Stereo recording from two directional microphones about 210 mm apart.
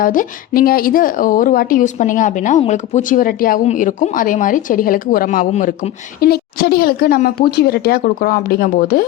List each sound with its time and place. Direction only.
0.0 s speech: 40° left (ahead or behind)